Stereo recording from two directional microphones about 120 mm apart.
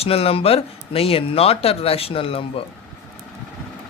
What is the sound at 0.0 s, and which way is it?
Speech, 55° left (ahead or behind).